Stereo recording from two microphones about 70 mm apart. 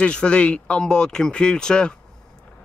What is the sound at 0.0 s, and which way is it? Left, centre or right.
A man's voice, centre.